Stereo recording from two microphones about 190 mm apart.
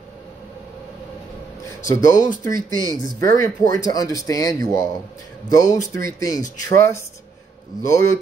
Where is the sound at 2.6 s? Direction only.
20° right (ahead or behind).